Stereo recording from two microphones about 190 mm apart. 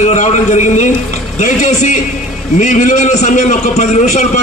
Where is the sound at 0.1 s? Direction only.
40° left (ahead or behind).